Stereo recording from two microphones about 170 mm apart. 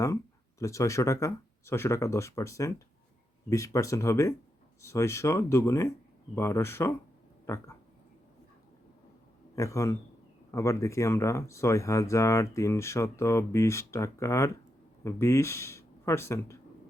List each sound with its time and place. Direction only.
0.6 s speech: 20° left (ahead or behind)
9.6 s speech: 20° left (ahead or behind)